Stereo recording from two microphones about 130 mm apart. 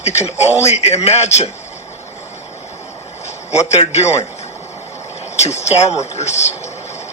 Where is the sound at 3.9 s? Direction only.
55° left (ahead or behind).